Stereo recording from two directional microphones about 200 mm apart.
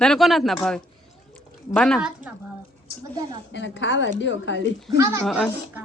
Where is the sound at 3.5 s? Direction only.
65° left (ahead or behind).